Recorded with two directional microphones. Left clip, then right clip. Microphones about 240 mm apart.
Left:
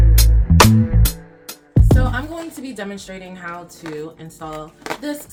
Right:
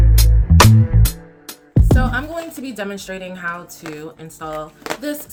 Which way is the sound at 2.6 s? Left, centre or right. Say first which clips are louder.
Right 3 dB; centre.